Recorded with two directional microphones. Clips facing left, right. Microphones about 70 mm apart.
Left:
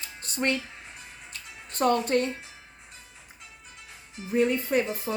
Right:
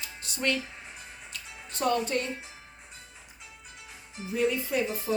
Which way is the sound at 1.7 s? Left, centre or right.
Left.